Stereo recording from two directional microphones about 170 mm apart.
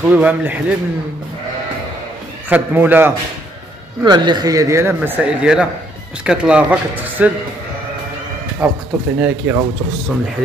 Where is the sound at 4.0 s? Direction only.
25° right (ahead or behind); by 7.3 s 10° right (ahead or behind).